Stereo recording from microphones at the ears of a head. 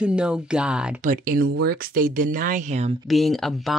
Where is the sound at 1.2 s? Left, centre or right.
Right.